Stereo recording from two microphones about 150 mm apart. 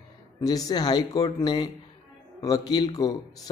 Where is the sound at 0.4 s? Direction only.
25° left (ahead or behind).